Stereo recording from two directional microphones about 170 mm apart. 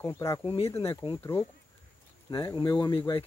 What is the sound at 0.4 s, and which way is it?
Speech, 30° left (ahead or behind).